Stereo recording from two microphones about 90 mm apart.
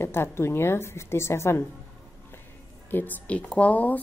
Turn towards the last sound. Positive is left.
turn(degrees=15)  # may be behind; listen again after turning